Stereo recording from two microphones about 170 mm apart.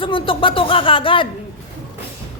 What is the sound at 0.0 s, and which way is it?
Speech, 30° left (ahead or behind).